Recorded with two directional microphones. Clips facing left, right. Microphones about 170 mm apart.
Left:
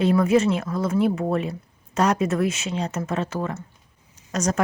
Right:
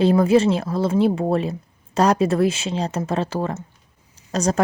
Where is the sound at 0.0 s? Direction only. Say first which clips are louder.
Right 3 dB; 30° right (ahead or behind).